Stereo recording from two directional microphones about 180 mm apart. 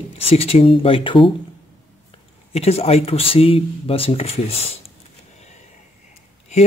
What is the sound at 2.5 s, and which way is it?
Speech, 35° left (ahead or behind).